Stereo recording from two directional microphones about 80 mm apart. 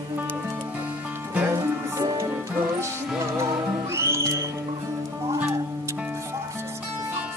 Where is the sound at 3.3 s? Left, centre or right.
Right.